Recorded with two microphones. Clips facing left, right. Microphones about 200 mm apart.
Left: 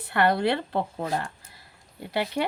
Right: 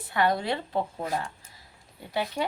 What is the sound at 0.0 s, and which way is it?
Speech, 65° left (ahead or behind).